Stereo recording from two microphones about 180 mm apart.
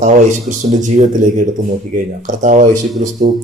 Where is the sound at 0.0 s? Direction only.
45° right (ahead or behind).